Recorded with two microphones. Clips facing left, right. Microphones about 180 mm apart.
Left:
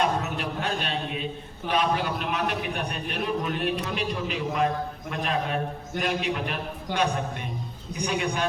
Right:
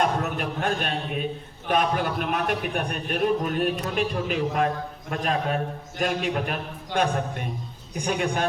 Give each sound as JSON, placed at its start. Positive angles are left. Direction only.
{"t": 0.0, "sound": "a man's voice", "side_deg": -50}